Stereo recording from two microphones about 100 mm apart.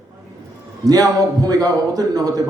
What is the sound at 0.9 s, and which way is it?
A man's voice, 40° right (ahead or behind).